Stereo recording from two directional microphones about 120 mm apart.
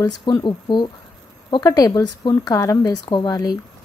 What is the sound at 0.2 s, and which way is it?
A woman's voice, 40° left (ahead or behind).